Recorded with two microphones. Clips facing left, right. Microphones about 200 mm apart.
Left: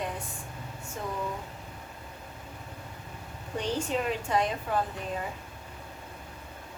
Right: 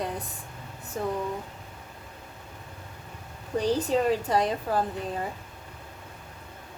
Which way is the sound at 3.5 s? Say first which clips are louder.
Right 6 dB; 35° right (ahead or behind).